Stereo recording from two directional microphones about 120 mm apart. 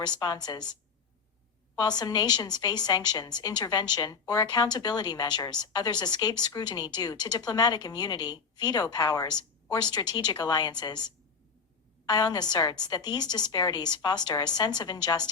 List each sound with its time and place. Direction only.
0.0 s a woman's voice: 35° left (ahead or behind)